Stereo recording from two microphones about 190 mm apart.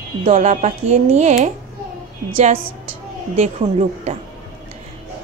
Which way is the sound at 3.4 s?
35° right (ahead or behind).